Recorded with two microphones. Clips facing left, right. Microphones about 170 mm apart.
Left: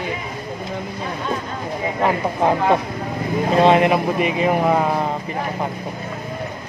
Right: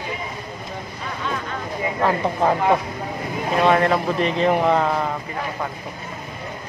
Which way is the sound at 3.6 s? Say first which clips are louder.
Left 3 dB; 20° left (ahead or behind).